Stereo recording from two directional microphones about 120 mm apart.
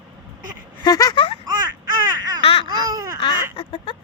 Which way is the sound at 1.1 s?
50° left (ahead or behind).